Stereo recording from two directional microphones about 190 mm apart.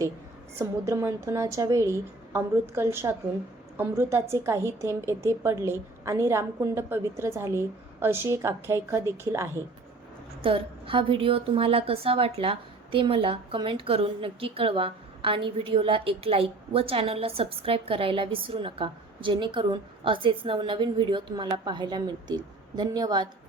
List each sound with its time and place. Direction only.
0.6 s a woman's voice: 15° right (ahead or behind)
10.4 s a woman's voice: 30° right (ahead or behind)